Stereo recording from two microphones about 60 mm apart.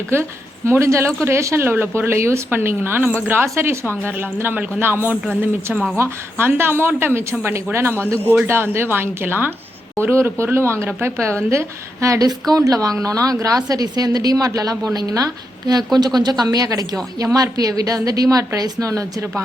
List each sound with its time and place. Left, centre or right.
0.1 s a woman's voice: right
1.6 s a woman's voice: right
4.0 s a woman's voice: right
11.4 s a woman's voice: right
12.5 s speech: right
13.4 s a woman's voice: right